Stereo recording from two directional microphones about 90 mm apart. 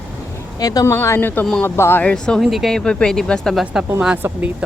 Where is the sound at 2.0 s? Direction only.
10° left (ahead or behind).